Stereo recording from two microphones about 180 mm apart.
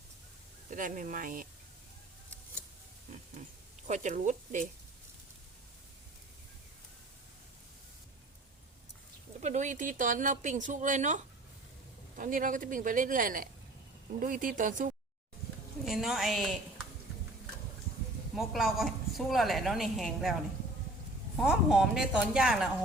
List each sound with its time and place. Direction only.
0.7 s speech: 50° right (ahead or behind)
3.8 s speech: 40° right (ahead or behind)
9.4 s speech: 40° right (ahead or behind)
15.8 s a woman's voice: centre (ahead or behind)
18.3 s a woman's voice: centre (ahead or behind)
21.4 s a woman's voice: 5° right (ahead or behind)